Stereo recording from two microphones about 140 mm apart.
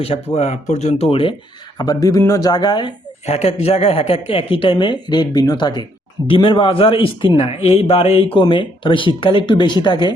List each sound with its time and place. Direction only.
0.0 s speech: 40° left (ahead or behind)
1.8 s speech: 30° left (ahead or behind)
3.2 s a man's voice: 50° left (ahead or behind); by 10.1 s 35° left (ahead or behind)